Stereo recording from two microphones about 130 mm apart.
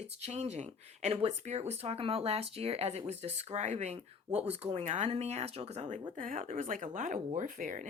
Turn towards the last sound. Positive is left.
turn(degrees=-75)  # may be behind; listen again after turning